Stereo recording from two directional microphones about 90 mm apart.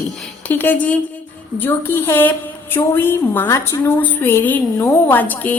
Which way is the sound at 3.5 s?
35° left (ahead or behind).